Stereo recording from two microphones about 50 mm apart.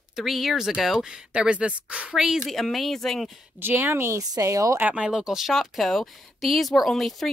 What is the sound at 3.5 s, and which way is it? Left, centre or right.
Speech, right.